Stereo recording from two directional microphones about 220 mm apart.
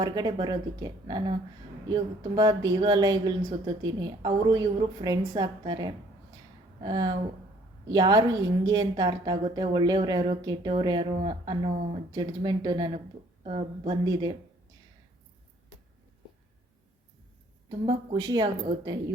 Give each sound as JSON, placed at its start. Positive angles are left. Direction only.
{"t": 0.0, "sound": "a woman's voice", "side_deg": -20}
{"t": 17.7, "sound": "a woman's voice", "side_deg": -20}